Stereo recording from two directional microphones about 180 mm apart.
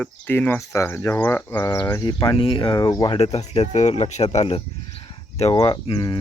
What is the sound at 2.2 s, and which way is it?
Speech, 30° left (ahead or behind).